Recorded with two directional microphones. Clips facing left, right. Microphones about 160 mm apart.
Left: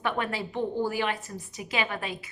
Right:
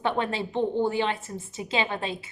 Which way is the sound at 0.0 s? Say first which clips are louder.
Right 3 dB; 25° right (ahead or behind).